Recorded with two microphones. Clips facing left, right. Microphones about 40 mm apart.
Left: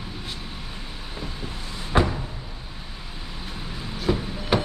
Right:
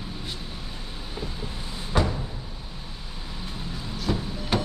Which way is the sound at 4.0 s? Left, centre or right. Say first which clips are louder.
Left 4 dB; centre.